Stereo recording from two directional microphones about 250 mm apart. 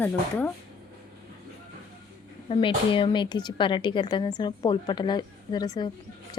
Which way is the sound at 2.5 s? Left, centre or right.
Left.